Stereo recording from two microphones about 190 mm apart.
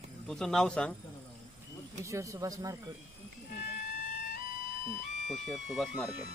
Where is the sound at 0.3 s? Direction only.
Centre (ahead or behind).